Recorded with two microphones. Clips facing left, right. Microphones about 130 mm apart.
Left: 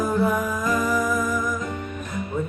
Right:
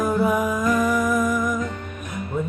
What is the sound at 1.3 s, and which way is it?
Music, centre (ahead or behind).